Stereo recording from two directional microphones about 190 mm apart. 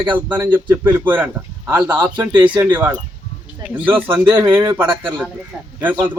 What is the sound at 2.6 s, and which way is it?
Speech, 10° right (ahead or behind).